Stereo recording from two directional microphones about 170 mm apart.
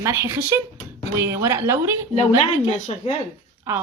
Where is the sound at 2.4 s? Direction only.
40° left (ahead or behind).